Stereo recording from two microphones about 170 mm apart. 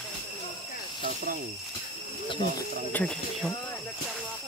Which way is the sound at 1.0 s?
55° right (ahead or behind).